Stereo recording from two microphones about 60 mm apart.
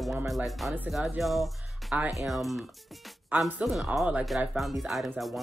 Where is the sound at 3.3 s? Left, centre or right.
Right.